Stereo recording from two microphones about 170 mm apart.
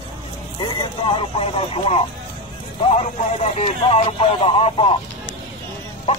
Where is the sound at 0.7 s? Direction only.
30° left (ahead or behind).